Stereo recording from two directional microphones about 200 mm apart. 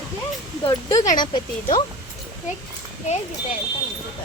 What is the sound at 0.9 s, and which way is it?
Speech, 40° left (ahead or behind).